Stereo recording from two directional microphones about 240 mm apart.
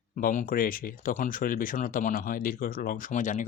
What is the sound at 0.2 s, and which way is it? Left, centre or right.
Speech, left.